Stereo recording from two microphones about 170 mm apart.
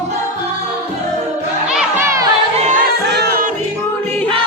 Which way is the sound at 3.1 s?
80° right.